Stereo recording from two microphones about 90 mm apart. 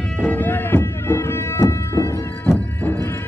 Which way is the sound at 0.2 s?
20° left (ahead or behind).